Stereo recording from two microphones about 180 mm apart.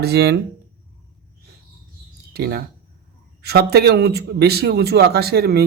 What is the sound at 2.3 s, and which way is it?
Speech, 65° right (ahead or behind).